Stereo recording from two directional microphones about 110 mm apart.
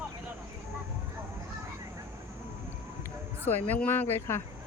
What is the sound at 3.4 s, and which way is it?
Speech, 15° left (ahead or behind).